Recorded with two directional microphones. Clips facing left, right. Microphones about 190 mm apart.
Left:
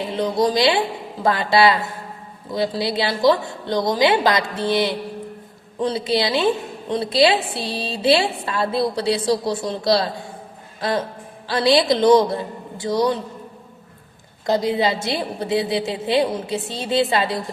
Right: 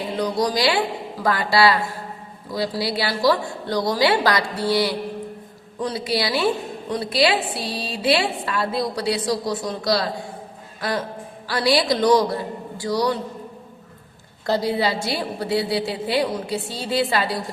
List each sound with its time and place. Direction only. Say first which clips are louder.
0.2 s a woman's voice: left 3 dB; 25° left (ahead or behind)
14.4 s a woman's voice: left 2 dB; 20° left (ahead or behind)